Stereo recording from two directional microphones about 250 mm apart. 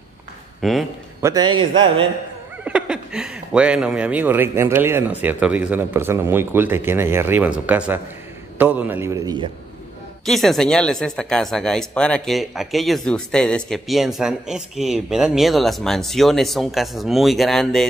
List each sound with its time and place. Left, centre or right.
0.6 s a man's voice: centre
1.2 s speech: centre
2.6 s speech: centre
10.2 s speech: centre